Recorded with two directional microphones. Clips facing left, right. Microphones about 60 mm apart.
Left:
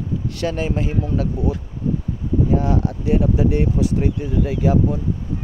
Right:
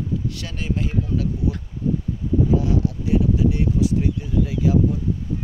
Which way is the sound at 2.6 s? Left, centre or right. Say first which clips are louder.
Left 1 dB; left.